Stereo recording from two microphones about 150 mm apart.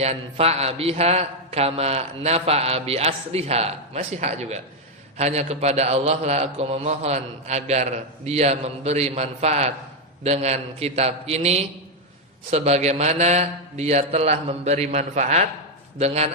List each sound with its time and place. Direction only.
0.0 s a man's voice: 45° right (ahead or behind)